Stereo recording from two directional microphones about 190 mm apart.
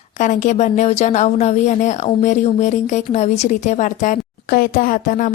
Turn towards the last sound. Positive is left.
turn(degrees=45)  # may be behind; listen again after turning